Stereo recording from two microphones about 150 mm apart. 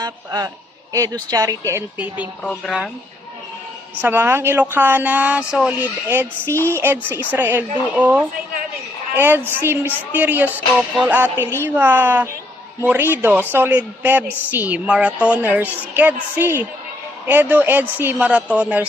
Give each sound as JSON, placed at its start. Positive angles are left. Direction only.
{"t": 0.0, "sound": "a woman's voice", "side_deg": -25}
{"t": 2.6, "sound": "speech", "side_deg": -5}
{"t": 4.0, "sound": "a woman's voice", "side_deg": -15}